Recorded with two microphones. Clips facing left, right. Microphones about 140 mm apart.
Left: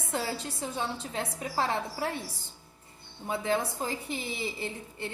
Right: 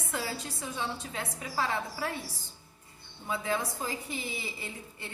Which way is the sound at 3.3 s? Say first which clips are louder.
Left 3 dB; 25° left (ahead or behind).